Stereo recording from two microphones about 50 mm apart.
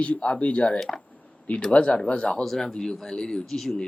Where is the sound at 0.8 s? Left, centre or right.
Centre.